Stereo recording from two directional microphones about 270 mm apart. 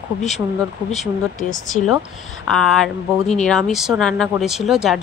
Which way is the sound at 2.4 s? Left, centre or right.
Centre.